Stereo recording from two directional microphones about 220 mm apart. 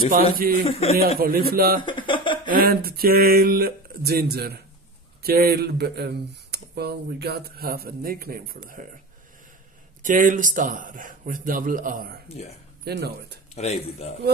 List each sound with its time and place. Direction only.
0.1 s speech: 40° right (ahead or behind)
0.7 s speech: 30° left (ahead or behind)
0.9 s speech: 45° right (ahead or behind)
1.8 s a sound: 20° left (ahead or behind)
2.4 s speech: 40° right (ahead or behind)
10.0 s speech: 40° right (ahead or behind)
13.6 s speech: 30° left (ahead or behind)